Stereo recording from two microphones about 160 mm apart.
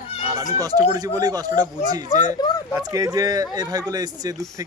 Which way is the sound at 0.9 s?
20° right (ahead or behind).